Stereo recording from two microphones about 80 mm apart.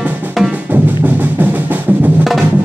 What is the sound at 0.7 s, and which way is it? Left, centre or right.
Music, right.